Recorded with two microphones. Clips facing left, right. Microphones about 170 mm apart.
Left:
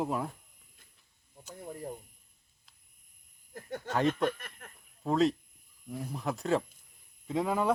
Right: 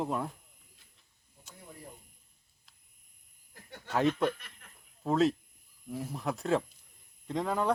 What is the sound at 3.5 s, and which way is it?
Speech, 45° left (ahead or behind).